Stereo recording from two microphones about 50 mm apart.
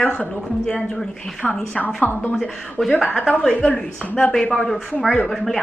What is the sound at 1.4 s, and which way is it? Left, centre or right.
Speech, left.